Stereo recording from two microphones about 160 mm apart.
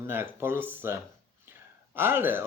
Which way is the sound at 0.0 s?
15° right (ahead or behind).